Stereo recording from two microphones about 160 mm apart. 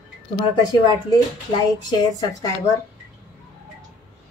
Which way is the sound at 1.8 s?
25° left (ahead or behind).